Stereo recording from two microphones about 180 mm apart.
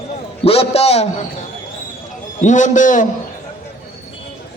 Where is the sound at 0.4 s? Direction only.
35° left (ahead or behind).